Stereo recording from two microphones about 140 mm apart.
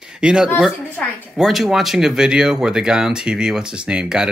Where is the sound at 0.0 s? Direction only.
5° right (ahead or behind).